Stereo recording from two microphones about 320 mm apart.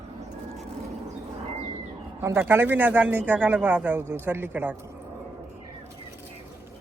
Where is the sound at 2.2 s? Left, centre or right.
Centre.